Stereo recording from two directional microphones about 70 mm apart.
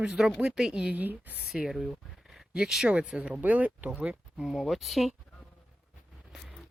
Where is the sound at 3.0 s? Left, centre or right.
Centre.